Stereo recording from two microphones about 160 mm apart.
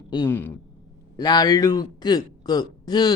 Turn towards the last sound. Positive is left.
turn(degrees=25)  # may be behind; listen again after turning